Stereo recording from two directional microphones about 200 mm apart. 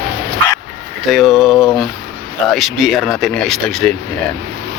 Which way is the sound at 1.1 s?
Centre (ahead or behind).